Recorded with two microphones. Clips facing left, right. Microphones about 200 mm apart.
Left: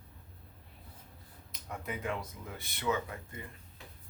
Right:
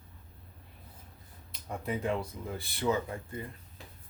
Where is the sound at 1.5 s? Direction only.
30° right (ahead or behind).